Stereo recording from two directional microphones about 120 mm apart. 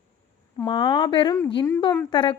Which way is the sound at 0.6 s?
45° left (ahead or behind).